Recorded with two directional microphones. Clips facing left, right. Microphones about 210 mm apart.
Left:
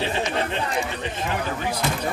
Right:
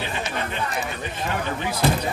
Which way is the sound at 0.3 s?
30° left (ahead or behind).